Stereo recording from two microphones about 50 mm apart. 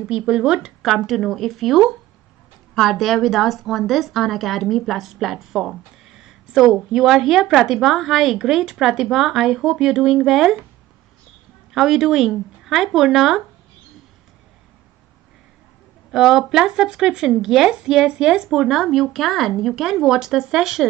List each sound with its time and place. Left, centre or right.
0.3 s speech: centre
0.8 s a woman's voice: centre
11.7 s speech: centre
16.1 s speech: centre
18.6 s a woman's voice: centre